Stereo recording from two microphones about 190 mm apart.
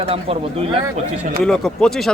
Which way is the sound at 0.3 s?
30° right (ahead or behind).